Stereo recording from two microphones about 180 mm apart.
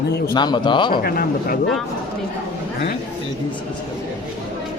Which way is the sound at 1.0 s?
55° left (ahead or behind).